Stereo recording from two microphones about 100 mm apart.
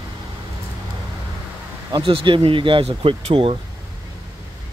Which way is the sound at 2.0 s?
60° right (ahead or behind).